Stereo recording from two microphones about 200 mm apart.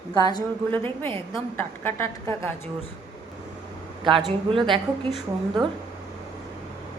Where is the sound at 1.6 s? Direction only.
10° left (ahead or behind).